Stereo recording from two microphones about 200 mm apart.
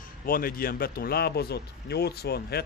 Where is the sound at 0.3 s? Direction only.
45° left (ahead or behind).